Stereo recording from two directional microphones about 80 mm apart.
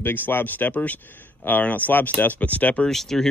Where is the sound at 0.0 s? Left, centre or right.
Left.